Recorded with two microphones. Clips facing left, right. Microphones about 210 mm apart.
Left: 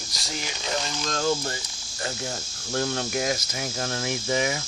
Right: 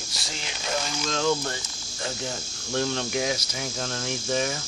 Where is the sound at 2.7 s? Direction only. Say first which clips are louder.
Even; 5° left (ahead or behind).